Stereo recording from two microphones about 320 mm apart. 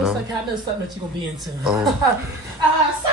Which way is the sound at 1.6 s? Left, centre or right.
Centre.